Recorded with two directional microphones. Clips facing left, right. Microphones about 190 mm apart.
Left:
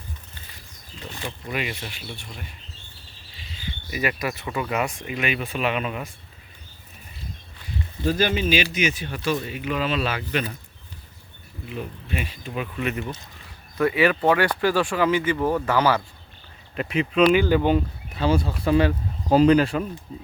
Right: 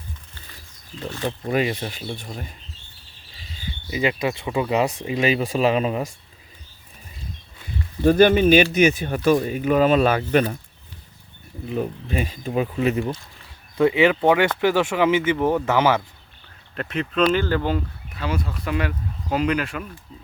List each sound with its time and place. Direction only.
1.2 s speech: 40° right (ahead or behind)
3.8 s speech: 20° right (ahead or behind)
4.9 s speech: 35° right (ahead or behind)
8.0 s speech: 55° right (ahead or behind)
11.7 s speech: 40° right (ahead or behind); by 16.0 s 20° right (ahead or behind)
16.7 s speech: 5° left (ahead or behind); by 19.9 s 30° left (ahead or behind)